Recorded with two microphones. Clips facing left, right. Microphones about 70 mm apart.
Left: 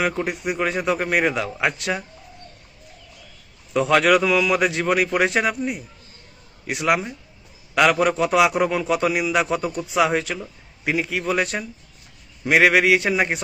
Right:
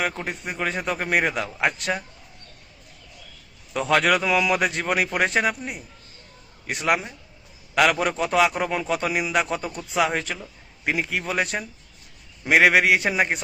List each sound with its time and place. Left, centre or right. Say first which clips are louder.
0.0 s a man's voice: left 4 dB; centre
3.7 s a man's voice: left 4 dB; centre